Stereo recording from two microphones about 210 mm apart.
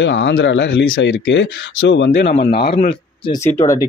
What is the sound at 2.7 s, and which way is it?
Speech, 25° left (ahead or behind).